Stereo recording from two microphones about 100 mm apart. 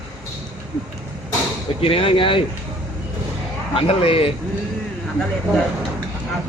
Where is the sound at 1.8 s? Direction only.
70° left (ahead or behind).